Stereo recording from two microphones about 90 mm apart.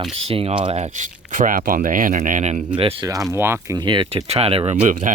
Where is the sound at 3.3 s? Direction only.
30° right (ahead or behind).